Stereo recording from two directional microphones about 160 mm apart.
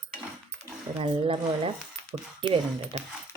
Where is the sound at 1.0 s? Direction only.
35° right (ahead or behind).